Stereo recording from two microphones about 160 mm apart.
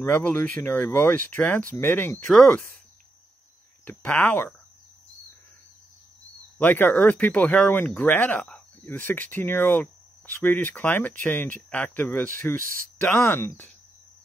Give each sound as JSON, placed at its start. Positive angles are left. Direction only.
{"t": 0.0, "sound": "speech", "side_deg": 10}
{"t": 3.8, "sound": "speech", "side_deg": 10}
{"t": 6.6, "sound": "speech", "side_deg": 10}
{"t": 12.6, "sound": "speech", "side_deg": -60}
{"t": 13.2, "sound": "speech", "side_deg": 15}